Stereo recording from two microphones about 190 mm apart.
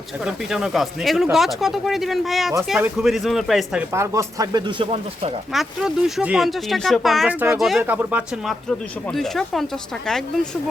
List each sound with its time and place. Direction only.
0.3 s speech: 5° right (ahead or behind)
3.9 s speech: 15° right (ahead or behind)
5.5 s speech: centre (ahead or behind)